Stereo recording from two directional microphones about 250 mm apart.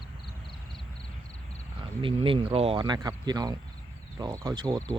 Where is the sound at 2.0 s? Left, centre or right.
Right.